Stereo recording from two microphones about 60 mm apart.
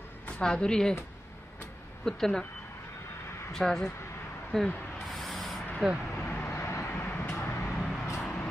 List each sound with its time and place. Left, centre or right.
0.4 s speech: centre
2.0 s speech: centre
3.5 s speech: centre
5.1 s a sound: centre
5.8 s speech: centre
6.1 s vehicle: left
7.1 s vehicle: left
7.7 s vehicle: centre
8.2 s a sound: left